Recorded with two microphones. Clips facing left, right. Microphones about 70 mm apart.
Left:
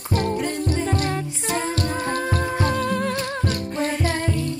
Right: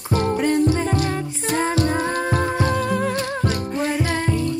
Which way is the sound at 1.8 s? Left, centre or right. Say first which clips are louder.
Right 3 dB; right.